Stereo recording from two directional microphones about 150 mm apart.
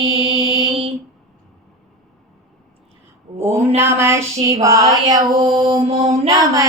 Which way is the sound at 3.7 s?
15° right (ahead or behind).